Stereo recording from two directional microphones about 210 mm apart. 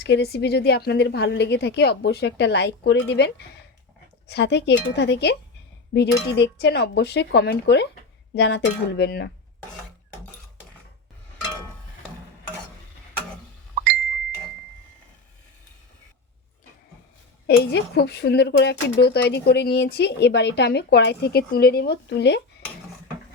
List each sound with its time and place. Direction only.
0.0 s speech: 50° left (ahead or behind)
17.4 s speech: 50° left (ahead or behind)